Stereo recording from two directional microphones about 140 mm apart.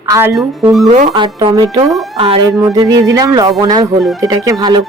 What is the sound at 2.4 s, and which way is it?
Speech, 25° right (ahead or behind).